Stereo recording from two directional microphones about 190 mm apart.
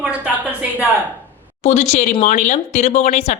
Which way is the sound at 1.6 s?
35° left (ahead or behind).